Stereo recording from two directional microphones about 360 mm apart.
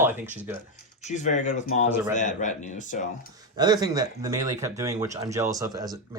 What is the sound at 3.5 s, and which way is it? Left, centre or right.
Speech, centre.